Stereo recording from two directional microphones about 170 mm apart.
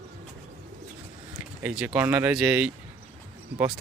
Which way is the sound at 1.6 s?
10° right (ahead or behind).